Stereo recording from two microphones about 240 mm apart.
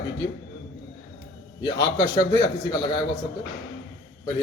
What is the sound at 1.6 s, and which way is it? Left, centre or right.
A man's voice, centre.